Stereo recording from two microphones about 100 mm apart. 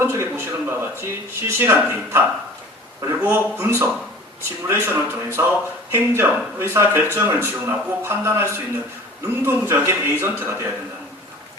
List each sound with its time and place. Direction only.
0.0 s speech: 25° right (ahead or behind)